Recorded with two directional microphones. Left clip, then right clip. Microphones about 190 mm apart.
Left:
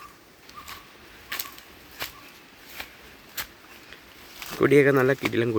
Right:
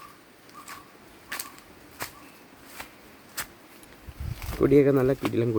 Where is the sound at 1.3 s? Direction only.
15° left (ahead or behind).